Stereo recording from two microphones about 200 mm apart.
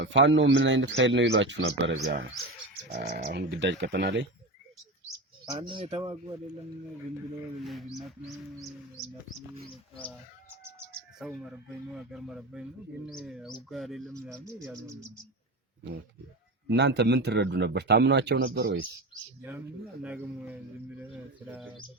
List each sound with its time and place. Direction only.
0.0 s a man's voice: 70° right (ahead or behind)
2.9 s speech: 50° right (ahead or behind)
3.3 s a man's voice: 60° right (ahead or behind)
5.5 s speech: 25° right (ahead or behind)
7.6 s speech: centre (ahead or behind)
10.6 s bird: 10° right (ahead or behind)
11.2 s speech: centre (ahead or behind)
16.6 s a man's voice: 60° right (ahead or behind)
19.4 s speech: 10° right (ahead or behind)